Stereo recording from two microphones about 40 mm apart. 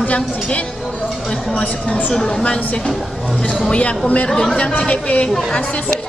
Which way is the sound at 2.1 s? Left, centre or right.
Centre.